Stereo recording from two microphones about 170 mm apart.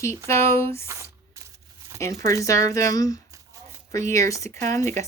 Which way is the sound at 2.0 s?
15° left (ahead or behind).